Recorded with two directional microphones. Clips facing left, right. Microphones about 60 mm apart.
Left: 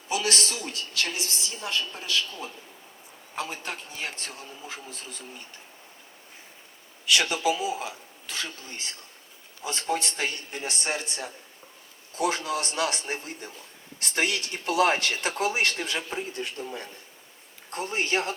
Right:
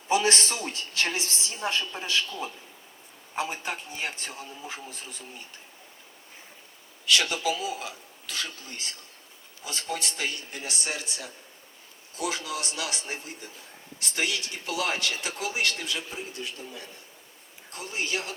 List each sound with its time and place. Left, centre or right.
0.1 s a woman's voice: right
3.3 s a man's voice: centre
7.0 s speech: left